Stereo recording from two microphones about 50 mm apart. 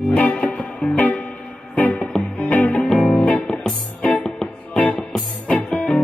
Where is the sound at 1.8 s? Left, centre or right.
Left.